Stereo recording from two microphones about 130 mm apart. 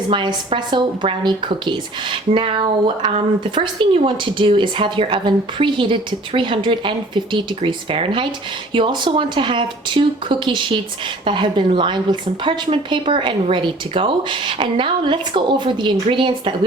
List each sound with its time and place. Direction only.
0.5 s speech: 40° right (ahead or behind)